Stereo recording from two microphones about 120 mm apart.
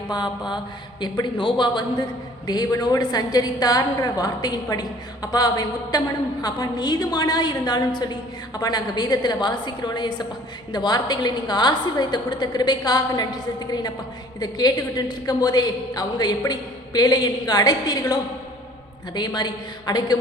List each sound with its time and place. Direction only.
0.1 s a woman's voice: 40° left (ahead or behind)